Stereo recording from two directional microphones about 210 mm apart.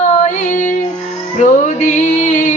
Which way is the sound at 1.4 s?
35° left (ahead or behind).